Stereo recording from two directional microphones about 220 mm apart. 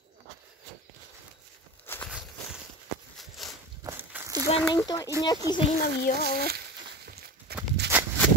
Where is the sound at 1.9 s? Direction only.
10° left (ahead or behind).